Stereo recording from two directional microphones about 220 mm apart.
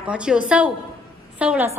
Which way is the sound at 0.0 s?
5° right (ahead or behind).